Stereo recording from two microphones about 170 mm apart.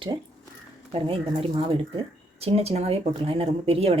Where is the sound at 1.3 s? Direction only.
35° right (ahead or behind).